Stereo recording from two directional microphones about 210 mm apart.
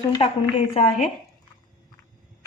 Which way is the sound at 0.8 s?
35° left (ahead or behind).